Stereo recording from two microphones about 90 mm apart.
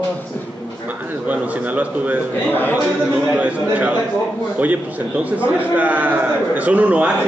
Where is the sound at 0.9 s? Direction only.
20° right (ahead or behind).